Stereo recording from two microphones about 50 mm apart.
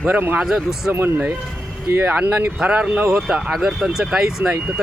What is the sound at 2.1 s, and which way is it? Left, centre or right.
Speech, right.